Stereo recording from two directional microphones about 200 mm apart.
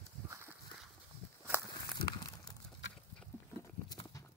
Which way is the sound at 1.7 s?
20° left (ahead or behind).